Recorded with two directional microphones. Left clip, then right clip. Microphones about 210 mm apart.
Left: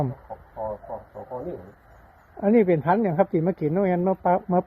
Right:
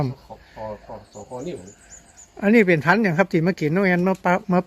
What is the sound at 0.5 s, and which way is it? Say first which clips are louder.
Speech: left 2 dB; 20° right (ahead or behind).